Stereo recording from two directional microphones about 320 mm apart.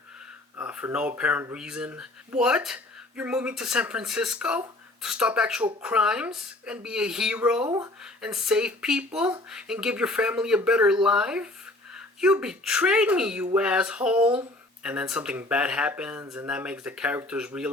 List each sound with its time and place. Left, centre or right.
0.5 s speech: centre